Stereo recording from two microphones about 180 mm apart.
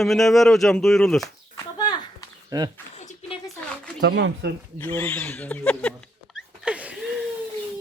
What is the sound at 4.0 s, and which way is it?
Speech, 80° right.